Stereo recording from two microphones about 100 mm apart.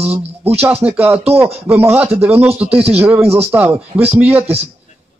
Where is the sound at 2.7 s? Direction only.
90° right.